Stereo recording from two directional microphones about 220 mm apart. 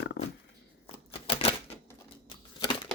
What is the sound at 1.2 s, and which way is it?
Typewriter, 25° left (ahead or behind).